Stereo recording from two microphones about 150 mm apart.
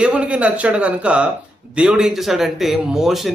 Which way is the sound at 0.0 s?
5° right (ahead or behind).